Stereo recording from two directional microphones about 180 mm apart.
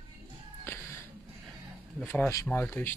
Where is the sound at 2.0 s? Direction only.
15° left (ahead or behind).